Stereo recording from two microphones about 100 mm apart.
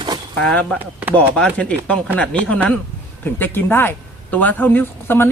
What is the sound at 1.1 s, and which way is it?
A man's voice, 10° left (ahead or behind).